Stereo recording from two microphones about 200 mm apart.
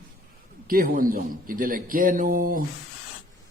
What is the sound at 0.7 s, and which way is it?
A man's voice, 45° right (ahead or behind).